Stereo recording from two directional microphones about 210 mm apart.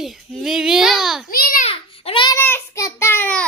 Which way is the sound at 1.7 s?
25° left (ahead or behind).